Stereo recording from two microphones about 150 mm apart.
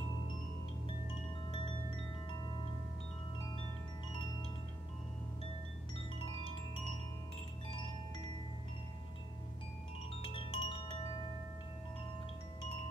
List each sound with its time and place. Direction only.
6.1 s music: 35° left (ahead or behind)
10.2 s chime: 35° left (ahead or behind)